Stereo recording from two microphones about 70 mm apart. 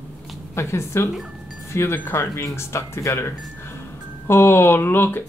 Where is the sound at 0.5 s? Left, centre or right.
Left.